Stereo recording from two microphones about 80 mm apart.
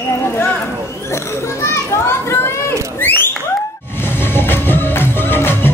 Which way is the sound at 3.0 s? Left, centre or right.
Left.